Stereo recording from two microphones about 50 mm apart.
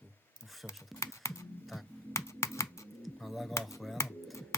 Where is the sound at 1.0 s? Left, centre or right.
Left.